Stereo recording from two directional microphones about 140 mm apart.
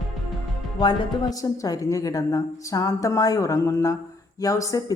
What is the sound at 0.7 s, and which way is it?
A woman's voice, 30° left (ahead or behind).